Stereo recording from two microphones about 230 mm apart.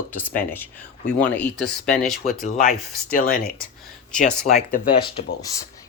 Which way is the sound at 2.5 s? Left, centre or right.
Left.